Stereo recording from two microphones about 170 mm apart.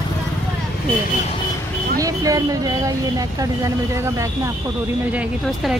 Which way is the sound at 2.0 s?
20° right (ahead or behind).